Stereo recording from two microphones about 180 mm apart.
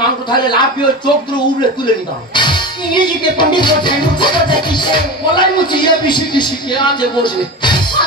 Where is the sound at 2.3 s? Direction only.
25° left (ahead or behind).